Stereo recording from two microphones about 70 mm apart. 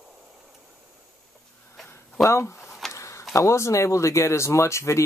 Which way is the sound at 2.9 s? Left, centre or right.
Left.